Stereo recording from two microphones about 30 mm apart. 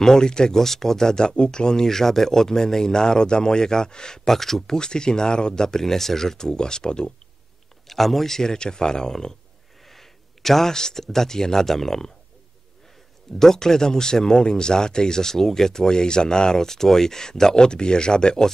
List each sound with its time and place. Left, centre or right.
0.0 s speech: left
0.6 s speech: centre
1.9 s speech: centre
4.3 s speech: centre
4.7 s speech: left
7.8 s speech: centre
8.4 s speech: left
9.8 s speech: centre
13.4 s speech: centre